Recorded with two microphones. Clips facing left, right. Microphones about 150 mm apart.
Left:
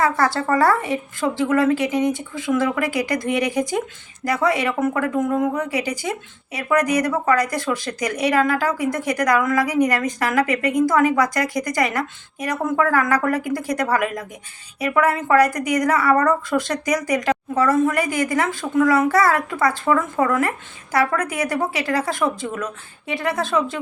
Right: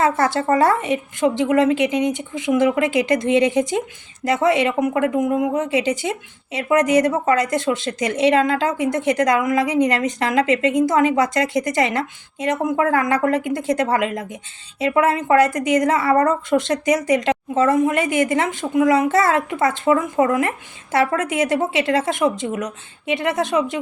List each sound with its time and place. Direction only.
0.0 s a woman's voice: 20° right (ahead or behind)